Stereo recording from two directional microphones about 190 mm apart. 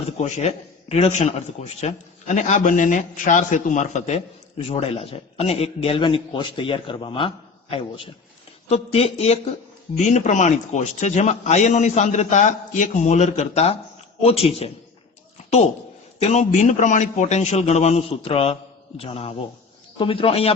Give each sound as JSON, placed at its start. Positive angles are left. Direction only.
{"t": 0.2, "sound": "a man's voice", "side_deg": 35}